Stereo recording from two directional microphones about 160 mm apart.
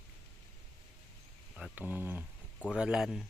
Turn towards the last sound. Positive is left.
turn(degrees=0)  # may be behind; listen again after turning